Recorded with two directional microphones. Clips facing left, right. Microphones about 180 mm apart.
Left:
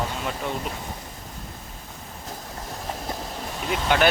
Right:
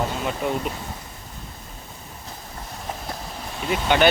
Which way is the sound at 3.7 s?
Centre (ahead or behind).